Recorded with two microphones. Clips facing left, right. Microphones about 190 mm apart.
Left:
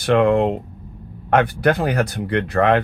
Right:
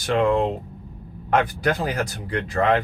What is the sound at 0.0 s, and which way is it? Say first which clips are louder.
Speech: left 4 dB; 65° left (ahead or behind).